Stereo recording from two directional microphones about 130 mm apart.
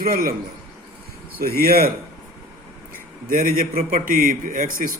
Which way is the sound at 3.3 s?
90° right.